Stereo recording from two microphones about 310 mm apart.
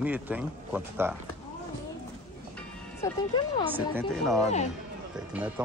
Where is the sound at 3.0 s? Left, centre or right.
Centre.